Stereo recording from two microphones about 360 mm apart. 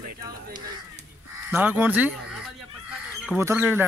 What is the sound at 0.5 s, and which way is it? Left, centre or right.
Speech, centre.